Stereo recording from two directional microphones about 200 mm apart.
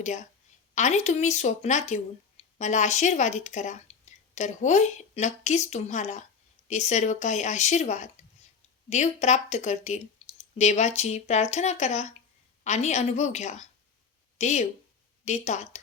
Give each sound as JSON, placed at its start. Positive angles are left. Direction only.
{"t": 0.0, "sound": "speech", "side_deg": 35}